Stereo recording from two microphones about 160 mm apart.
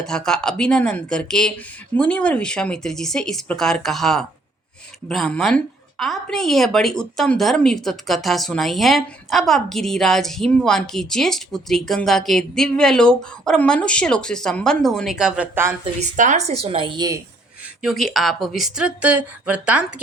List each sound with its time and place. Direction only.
0.0 s a woman's voice: 5° left (ahead or behind)
16.1 s speech: 50° right (ahead or behind); by 17.2 s 30° right (ahead or behind)
17.8 s a woman's voice: centre (ahead or behind)